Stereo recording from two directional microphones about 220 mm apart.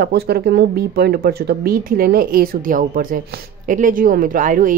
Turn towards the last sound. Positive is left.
turn(degrees=-40)  # may be behind; listen again after turning